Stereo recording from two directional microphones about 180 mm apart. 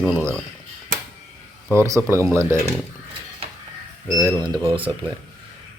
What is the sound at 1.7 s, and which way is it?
Speech, 15° right (ahead or behind).